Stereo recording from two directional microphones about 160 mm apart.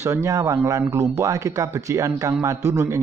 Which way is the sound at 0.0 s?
20° right (ahead or behind).